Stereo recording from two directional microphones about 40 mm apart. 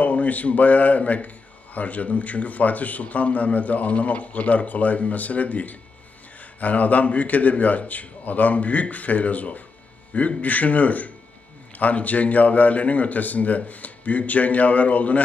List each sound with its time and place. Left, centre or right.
0.0 s a man's voice: left